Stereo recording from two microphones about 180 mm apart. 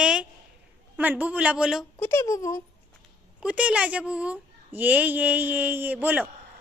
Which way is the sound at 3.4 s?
5° right (ahead or behind).